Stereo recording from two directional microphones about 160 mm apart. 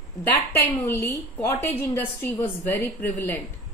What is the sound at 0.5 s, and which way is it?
Speech, 15° left (ahead or behind).